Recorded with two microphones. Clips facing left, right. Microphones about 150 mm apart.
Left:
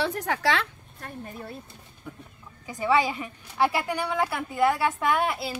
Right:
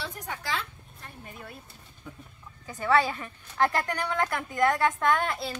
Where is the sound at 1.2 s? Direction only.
35° left (ahead or behind).